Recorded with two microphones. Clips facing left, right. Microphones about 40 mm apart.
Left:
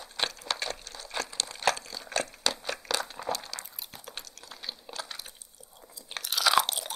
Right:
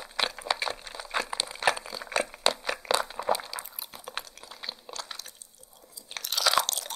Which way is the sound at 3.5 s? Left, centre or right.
Centre.